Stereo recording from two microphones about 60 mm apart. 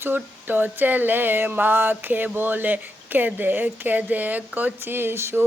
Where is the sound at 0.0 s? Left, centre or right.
Right.